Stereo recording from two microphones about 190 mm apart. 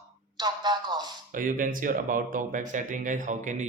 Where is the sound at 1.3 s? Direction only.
45° right (ahead or behind).